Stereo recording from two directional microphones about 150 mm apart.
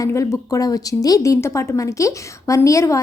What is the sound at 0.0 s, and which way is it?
A woman's voice, 20° left (ahead or behind).